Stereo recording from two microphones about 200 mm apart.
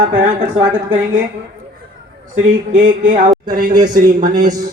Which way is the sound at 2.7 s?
40° right (ahead or behind).